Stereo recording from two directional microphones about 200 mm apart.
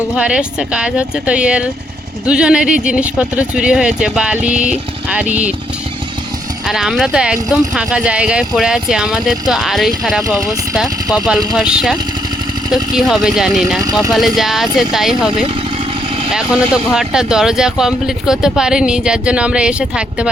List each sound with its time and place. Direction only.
0.2 s speech: 5° right (ahead or behind)
6.7 s speech: centre (ahead or behind)
16.3 s speech: 5° right (ahead or behind)